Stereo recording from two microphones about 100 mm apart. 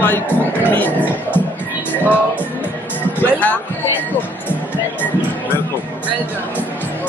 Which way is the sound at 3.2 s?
20° left (ahead or behind).